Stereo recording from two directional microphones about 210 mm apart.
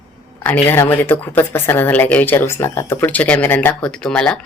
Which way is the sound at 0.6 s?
10° left (ahead or behind).